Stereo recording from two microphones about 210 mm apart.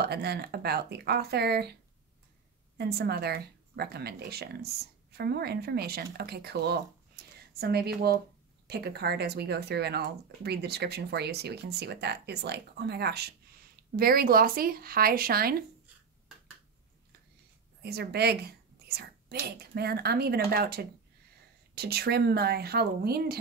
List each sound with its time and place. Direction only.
0.0 s speech: 50° right (ahead or behind)
2.8 s speech: 50° right (ahead or behind)
7.2 s a sound: 45° right (ahead or behind)
7.5 s speech: 50° right (ahead or behind)
17.8 s speech: 50° right (ahead or behind)